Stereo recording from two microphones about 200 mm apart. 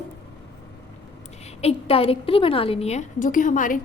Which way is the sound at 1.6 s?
30° left (ahead or behind).